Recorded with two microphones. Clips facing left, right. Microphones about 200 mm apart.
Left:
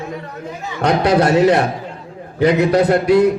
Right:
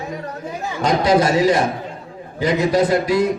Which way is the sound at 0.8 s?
65° left (ahead or behind).